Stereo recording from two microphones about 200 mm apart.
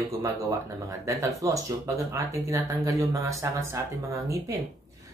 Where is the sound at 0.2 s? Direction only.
15° right (ahead or behind).